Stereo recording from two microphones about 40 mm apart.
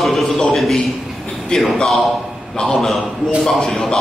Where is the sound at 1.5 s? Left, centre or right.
Centre.